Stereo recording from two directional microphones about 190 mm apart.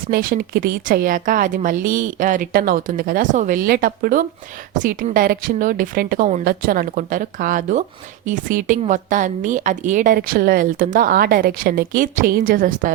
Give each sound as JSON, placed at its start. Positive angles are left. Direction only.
{"t": 0.1, "sound": "a woman's voice", "side_deg": -50}